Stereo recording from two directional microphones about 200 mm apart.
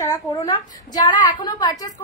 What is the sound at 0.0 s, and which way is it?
A woman's voice, 15° left (ahead or behind).